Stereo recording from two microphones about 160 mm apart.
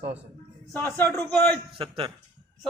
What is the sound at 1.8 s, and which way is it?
Speech, 35° right (ahead or behind).